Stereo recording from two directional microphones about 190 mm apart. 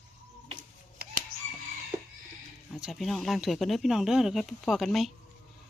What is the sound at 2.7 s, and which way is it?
Speech, centre (ahead or behind).